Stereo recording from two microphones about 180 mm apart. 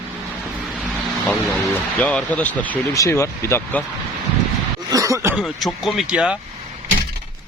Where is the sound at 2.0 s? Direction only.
5° left (ahead or behind).